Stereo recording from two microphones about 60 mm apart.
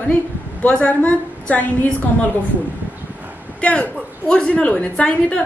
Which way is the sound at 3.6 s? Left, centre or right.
Centre.